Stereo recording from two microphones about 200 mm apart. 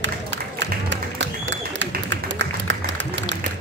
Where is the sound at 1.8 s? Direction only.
65° right (ahead or behind).